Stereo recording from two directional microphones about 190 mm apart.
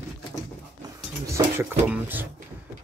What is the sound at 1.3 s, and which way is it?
Speech, 10° right (ahead or behind).